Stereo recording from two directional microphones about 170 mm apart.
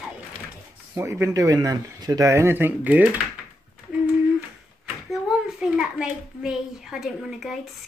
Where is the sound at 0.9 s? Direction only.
15° right (ahead or behind).